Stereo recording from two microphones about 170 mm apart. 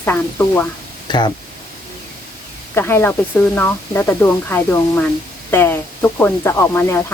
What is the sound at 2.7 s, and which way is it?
Speech, 15° left (ahead or behind).